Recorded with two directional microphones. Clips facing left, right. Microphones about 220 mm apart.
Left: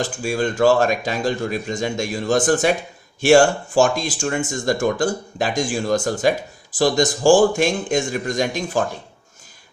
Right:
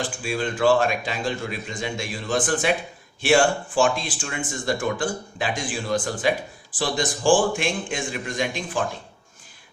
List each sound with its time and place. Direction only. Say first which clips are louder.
0.0 s speech: left 5 dB; 45° left (ahead or behind)